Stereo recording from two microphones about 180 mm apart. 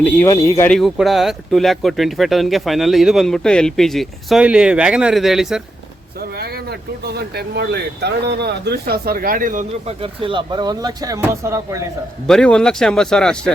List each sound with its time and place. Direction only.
0.0 s speech: 10° left (ahead or behind)
0.7 s speech: centre (ahead or behind)
6.1 s speech: 60° right (ahead or behind)
10.0 s speech: 30° right (ahead or behind)
12.3 s speech: 5° left (ahead or behind)